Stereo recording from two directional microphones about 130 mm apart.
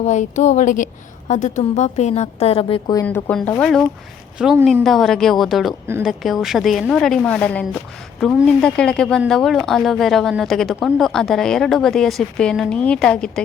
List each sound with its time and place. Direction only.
0.0 s a woman's voice: 65° left (ahead or behind); by 2.9 s 45° left (ahead or behind)
2.9 s speech: 20° left (ahead or behind)
3.6 s a woman's voice: 5° left (ahead or behind)